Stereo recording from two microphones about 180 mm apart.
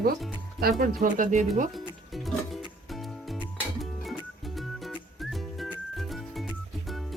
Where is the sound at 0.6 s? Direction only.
50° right (ahead or behind).